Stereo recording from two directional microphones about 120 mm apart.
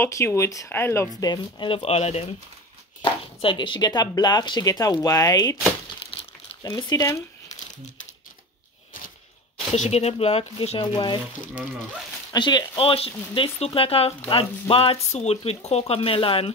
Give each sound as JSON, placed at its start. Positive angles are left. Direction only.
{"t": 0.0, "sound": "speech", "side_deg": 25}
{"t": 1.2, "sound": "speech", "side_deg": 35}
{"t": 1.7, "sound": "speech", "side_deg": 60}
{"t": 3.0, "sound": "speech", "side_deg": 45}
{"t": 6.1, "sound": "crumpling", "side_deg": 50}
{"t": 6.6, "sound": "speech", "side_deg": 35}
{"t": 9.8, "sound": "speech", "side_deg": 60}
{"t": 10.8, "sound": "speech", "side_deg": 40}
{"t": 12.3, "sound": "speech", "side_deg": 40}
{"t": 15.0, "sound": "speech", "side_deg": 65}